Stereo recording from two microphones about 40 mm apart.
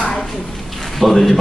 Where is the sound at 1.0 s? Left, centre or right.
Centre.